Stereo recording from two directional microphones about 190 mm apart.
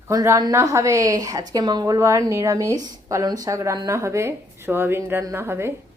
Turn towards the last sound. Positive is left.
turn(degrees=-15)  # may be behind; listen again after turning